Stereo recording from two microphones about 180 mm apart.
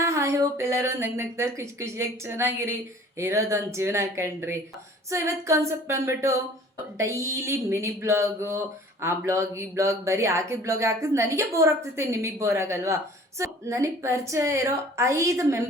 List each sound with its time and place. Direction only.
0.0 s speech: 15° right (ahead or behind)